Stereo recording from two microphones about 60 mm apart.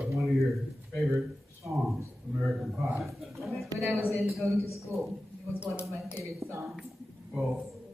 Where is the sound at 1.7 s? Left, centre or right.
Centre.